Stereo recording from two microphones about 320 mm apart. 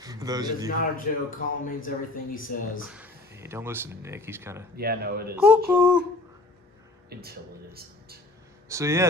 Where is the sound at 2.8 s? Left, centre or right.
Centre.